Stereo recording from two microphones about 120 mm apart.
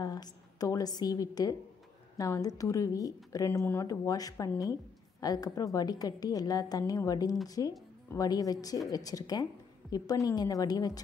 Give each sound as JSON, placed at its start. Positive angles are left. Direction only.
{"t": 0.0, "sound": "a woman's voice", "side_deg": 35}